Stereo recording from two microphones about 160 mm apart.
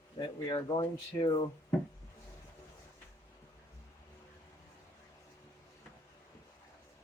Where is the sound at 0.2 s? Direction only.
25° left (ahead or behind).